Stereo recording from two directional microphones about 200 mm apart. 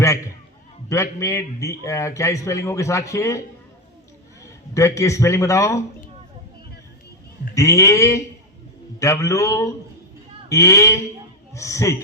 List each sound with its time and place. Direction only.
0.9 s a man's voice: 15° left (ahead or behind)
4.7 s a man's voice: 15° left (ahead or behind)
7.5 s a man's voice: 15° left (ahead or behind)